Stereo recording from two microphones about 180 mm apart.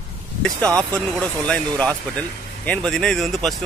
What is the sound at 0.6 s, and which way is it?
Speech, 15° right (ahead or behind).